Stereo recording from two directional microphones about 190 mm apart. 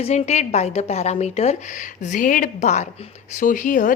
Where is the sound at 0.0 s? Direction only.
35° left (ahead or behind).